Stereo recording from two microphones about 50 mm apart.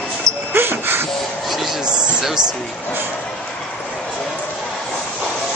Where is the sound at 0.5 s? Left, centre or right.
Right.